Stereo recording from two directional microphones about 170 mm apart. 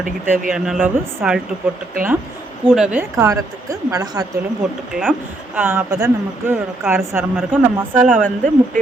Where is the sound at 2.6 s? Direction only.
5° right (ahead or behind); by 4.3 s 25° right (ahead or behind).